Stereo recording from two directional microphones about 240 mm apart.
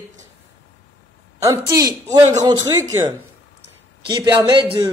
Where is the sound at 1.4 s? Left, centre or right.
Centre.